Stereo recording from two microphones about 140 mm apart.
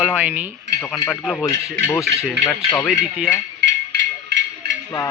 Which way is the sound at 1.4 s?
20° left (ahead or behind).